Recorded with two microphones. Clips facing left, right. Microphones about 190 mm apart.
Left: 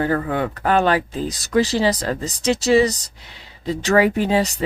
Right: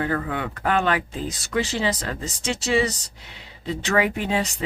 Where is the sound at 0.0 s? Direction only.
35° left (ahead or behind).